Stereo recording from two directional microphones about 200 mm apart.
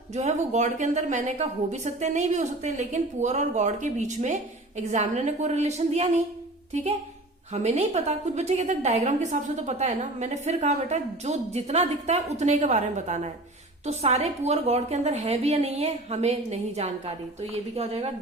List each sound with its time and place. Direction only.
0.1 s a woman's voice: 35° right (ahead or behind)